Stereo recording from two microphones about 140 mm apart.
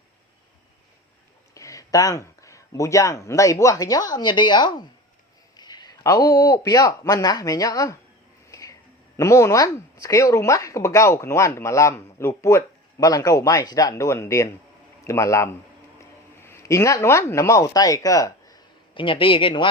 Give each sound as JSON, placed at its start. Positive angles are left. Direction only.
{"t": 1.5, "sound": "speech", "side_deg": 25}
{"t": 8.4, "sound": "music", "side_deg": 25}
{"t": 9.1, "sound": "speech", "side_deg": 20}